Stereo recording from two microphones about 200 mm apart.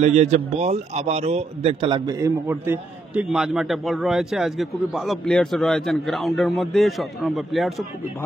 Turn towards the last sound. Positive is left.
turn(degrees=0)  # may be behind; listen again after turning